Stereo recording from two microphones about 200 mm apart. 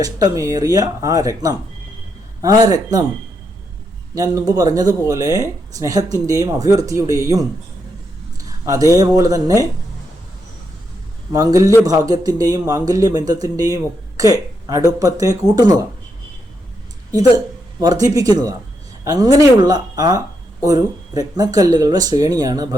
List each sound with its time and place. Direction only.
0.0 s speech: 20° right (ahead or behind)
4.1 s speech: 15° right (ahead or behind)
8.4 s speech: 15° right (ahead or behind)
11.3 s speech: 15° right (ahead or behind)
17.2 s a man's voice: 20° right (ahead or behind)